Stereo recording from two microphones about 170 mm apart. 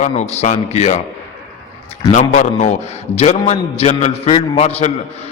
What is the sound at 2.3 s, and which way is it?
A man's voice, 45° left (ahead or behind).